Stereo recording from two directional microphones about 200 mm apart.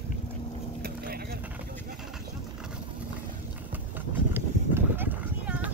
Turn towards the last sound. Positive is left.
turn(degrees=-5)  # may be behind; listen again after turning